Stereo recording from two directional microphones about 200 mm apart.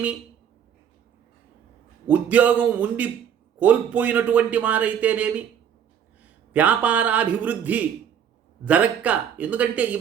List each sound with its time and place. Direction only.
2.0 s speech: 5° right (ahead or behind)
6.5 s speech: 5° right (ahead or behind)